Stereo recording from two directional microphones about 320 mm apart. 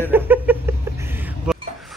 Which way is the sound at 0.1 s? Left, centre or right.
Centre.